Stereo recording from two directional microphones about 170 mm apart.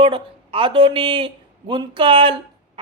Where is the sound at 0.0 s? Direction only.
30° right (ahead or behind).